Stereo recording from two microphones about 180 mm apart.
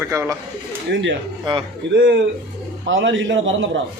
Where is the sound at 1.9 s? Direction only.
85° right.